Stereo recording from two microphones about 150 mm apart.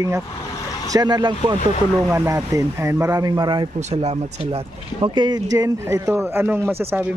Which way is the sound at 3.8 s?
50° right (ahead or behind).